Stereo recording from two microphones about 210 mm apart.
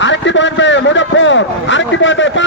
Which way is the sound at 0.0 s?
60° left (ahead or behind).